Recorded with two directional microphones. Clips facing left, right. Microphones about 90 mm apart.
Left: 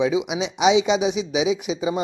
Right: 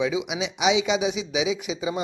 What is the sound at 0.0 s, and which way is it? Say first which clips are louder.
Speech: left 4 dB; 25° left (ahead or behind).